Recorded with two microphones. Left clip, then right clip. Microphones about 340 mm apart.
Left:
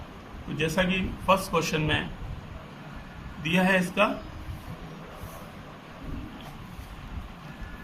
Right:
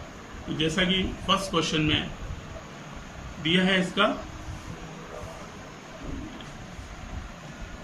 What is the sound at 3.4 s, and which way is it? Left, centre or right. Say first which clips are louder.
Speech: even; centre.